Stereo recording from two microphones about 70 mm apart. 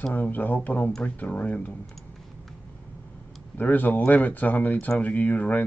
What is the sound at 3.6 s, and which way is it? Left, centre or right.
Speech, left.